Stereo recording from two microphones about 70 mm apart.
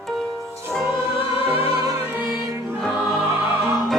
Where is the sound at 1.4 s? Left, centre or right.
Right.